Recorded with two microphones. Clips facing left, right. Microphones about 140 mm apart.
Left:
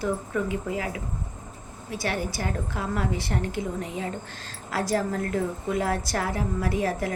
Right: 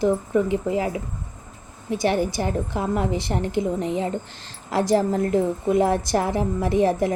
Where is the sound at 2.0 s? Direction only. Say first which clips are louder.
Right 7 dB; 20° right (ahead or behind).